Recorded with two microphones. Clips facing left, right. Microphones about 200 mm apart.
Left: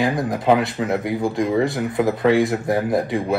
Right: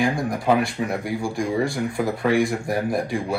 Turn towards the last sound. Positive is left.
turn(degrees=20)  # may be behind; listen again after turning